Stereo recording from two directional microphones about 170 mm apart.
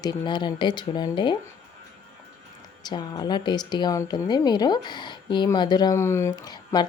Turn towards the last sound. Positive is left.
turn(degrees=25)  # may be behind; listen again after turning